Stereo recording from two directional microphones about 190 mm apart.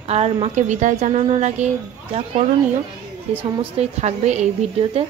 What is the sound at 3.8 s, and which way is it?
Speech, 35° right (ahead or behind).